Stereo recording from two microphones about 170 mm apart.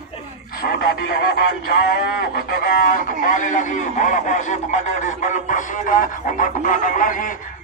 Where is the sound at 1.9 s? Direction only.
65° left (ahead or behind).